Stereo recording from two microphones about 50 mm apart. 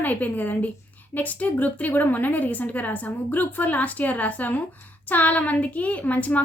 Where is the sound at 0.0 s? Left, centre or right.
Left.